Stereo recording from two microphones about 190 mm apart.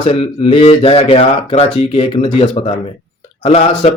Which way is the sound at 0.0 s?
30° left (ahead or behind).